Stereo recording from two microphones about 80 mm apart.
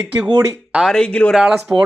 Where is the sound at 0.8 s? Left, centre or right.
Centre.